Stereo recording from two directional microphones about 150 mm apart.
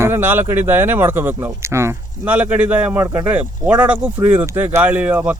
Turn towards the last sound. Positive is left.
turn(degrees=-10)  # may be behind; listen again after turning